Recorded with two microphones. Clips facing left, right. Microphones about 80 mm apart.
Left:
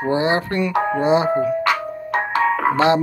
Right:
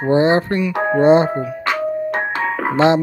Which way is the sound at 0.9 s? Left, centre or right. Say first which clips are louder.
Right 6 dB; right.